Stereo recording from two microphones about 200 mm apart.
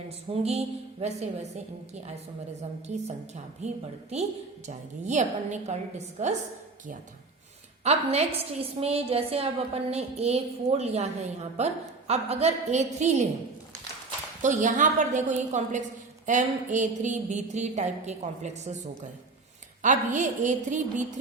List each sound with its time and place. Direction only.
0.3 s a woman's voice: 30° right (ahead or behind)
7.9 s a woman's voice: 30° right (ahead or behind)
14.4 s a woman's voice: 40° right (ahead or behind)
19.8 s a woman's voice: 40° right (ahead or behind)